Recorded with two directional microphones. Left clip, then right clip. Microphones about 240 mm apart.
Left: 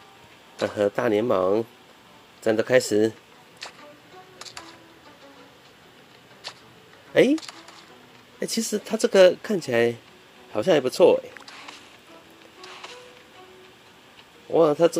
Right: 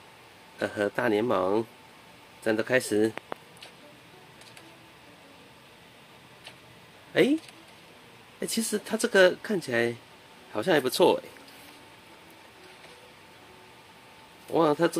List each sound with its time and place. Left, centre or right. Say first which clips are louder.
0.6 s speech: left 5 dB; centre
2.4 s speech: left 6 dB; centre
7.1 s speech: left 5 dB; centre
8.4 s speech: left 3 dB; centre
14.5 s speech: left 5 dB; centre